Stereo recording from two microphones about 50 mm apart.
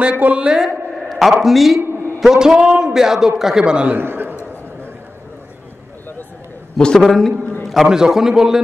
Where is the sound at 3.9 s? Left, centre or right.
Right.